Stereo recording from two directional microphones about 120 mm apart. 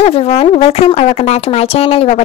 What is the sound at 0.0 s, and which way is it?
Speech, 55° left (ahead or behind).